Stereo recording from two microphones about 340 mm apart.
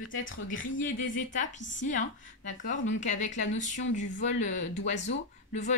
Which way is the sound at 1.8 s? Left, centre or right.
Left.